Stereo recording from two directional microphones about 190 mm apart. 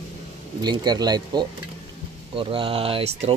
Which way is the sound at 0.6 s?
20° right (ahead or behind).